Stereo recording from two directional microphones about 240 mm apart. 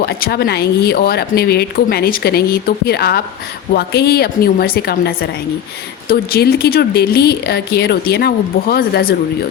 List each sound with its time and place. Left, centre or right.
0.0 s speech: left